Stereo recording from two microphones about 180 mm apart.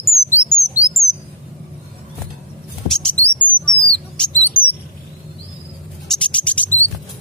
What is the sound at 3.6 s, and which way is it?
Rodents, 5° left (ahead or behind).